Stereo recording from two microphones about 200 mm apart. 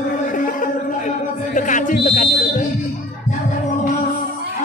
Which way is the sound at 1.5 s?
40° left (ahead or behind).